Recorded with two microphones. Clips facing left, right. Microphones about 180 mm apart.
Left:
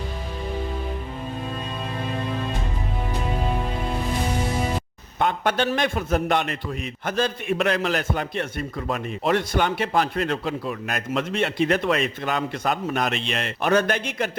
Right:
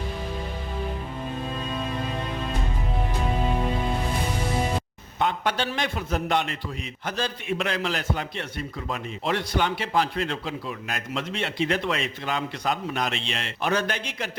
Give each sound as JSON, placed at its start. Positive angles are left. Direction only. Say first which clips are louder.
{"t": 5.2, "sound": "a man's voice", "louder": "left 3 dB", "side_deg": 50}